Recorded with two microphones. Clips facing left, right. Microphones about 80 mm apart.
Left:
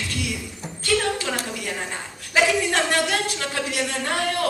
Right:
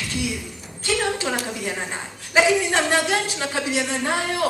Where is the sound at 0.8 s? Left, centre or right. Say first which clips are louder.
Even; right.